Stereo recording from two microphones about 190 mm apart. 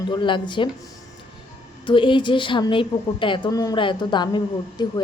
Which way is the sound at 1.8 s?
25° left (ahead or behind).